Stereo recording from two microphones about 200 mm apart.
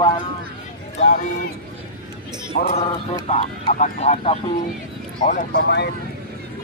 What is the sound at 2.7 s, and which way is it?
Speech, 30° left (ahead or behind).